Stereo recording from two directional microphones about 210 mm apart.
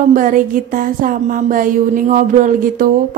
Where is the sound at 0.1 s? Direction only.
40° right (ahead or behind).